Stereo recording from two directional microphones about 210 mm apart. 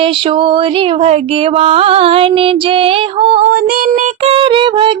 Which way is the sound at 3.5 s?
40° right (ahead or behind).